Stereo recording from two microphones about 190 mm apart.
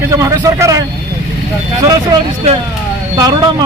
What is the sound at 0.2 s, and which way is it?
Speech, 15° right (ahead or behind).